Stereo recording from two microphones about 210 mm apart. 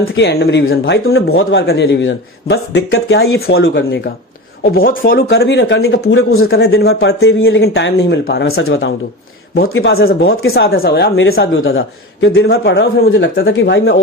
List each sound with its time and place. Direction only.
0.0 s speech: 55° left (ahead or behind)
0.6 s speech: 70° left (ahead or behind)
1.6 s speech: 55° left (ahead or behind)
3.6 s speech: 55° left (ahead or behind); by 6.7 s 70° left (ahead or behind)
6.7 s speech: 50° left (ahead or behind)
7.2 s speech: 70° left (ahead or behind); by 8.5 s 55° left (ahead or behind)
8.5 s speech: 70° left (ahead or behind)
9.9 s speech: 50° left (ahead or behind)